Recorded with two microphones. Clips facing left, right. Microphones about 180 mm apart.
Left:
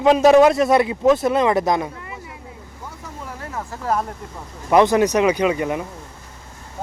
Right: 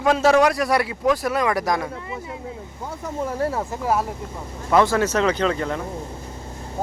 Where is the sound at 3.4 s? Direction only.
30° right (ahead or behind).